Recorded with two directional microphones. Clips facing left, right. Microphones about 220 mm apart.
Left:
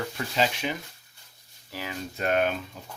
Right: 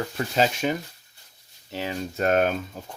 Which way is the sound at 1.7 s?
30° right (ahead or behind).